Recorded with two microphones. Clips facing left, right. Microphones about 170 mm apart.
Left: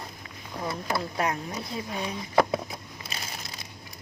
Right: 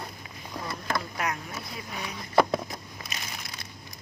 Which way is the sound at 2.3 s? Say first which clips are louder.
Right 1 dB; 5° left (ahead or behind).